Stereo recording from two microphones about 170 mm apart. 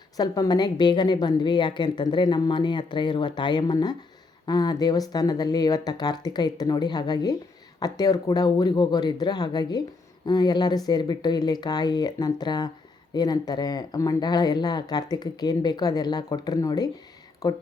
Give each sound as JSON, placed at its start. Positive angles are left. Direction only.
{"t": 0.2, "sound": "a woman's voice", "side_deg": 25}